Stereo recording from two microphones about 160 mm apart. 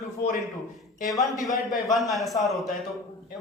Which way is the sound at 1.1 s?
Centre (ahead or behind).